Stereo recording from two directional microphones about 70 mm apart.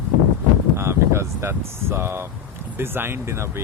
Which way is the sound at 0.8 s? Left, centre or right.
Right.